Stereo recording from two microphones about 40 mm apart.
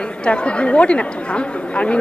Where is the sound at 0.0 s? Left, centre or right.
Left.